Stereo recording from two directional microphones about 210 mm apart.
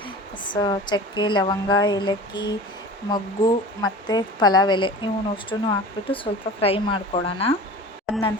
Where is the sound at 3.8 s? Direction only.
20° left (ahead or behind).